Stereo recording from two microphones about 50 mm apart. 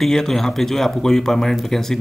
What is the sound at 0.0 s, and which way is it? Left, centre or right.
Speech, centre.